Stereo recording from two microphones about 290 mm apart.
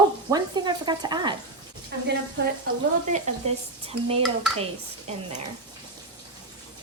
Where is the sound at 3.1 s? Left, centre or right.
Right.